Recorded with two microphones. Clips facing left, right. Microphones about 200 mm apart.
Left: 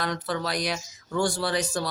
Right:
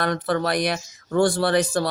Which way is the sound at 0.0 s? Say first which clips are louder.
Right 6 dB; 55° right (ahead or behind).